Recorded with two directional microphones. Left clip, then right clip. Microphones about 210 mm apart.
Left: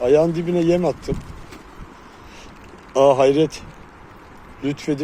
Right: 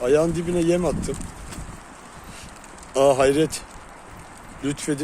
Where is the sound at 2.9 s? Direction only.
15° left (ahead or behind).